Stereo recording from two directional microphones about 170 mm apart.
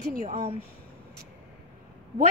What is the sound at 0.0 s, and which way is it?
Speech, 60° right (ahead or behind).